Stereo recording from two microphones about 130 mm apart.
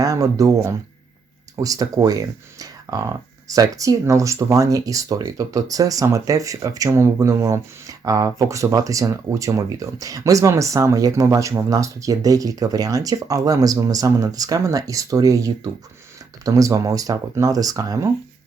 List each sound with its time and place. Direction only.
0.0 s speech: 25° right (ahead or behind)